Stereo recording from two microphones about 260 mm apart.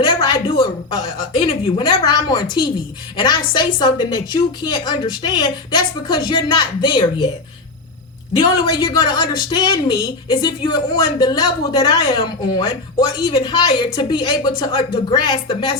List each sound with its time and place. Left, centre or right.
0.0 s a sound: centre
1.4 s a woman's voice: centre
8.4 s a woman's voice: centre